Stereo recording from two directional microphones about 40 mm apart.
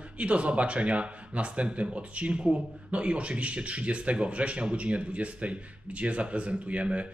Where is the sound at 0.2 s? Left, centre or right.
Right.